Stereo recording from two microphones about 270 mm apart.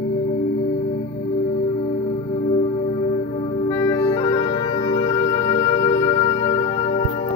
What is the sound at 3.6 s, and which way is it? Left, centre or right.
Music, centre.